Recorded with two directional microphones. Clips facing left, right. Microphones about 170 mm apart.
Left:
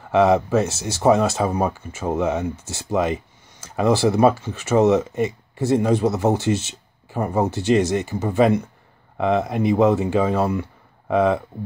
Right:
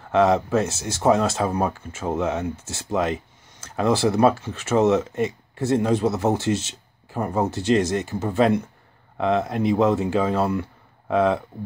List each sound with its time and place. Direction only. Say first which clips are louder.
0.1 s speech: left 2 dB; 5° left (ahead or behind)